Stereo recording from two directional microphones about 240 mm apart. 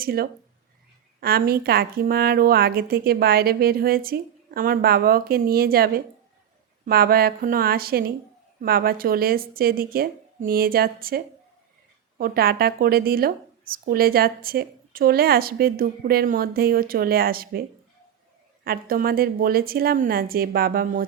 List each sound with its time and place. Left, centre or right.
0.0 s speech: right
18.6 s speech: right